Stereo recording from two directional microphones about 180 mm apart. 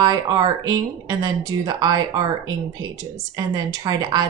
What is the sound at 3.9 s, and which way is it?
Speech, 20° right (ahead or behind).